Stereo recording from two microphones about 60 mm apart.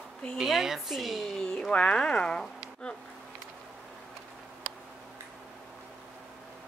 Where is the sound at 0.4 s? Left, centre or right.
Centre.